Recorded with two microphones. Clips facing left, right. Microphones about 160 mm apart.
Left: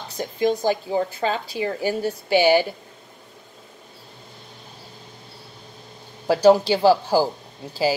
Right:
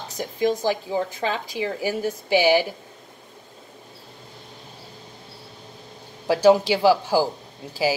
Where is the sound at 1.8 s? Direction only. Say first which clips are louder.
Left 1 dB; 10° right (ahead or behind).